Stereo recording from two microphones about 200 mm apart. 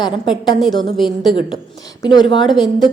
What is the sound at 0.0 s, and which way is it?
Speech, 20° left (ahead or behind).